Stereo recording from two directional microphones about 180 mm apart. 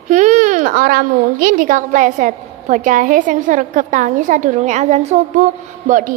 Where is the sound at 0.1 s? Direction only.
45° right (ahead or behind).